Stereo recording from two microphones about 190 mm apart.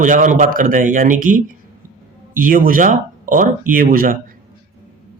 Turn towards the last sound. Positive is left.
turn(degrees=-50)  # may be behind; listen again after turning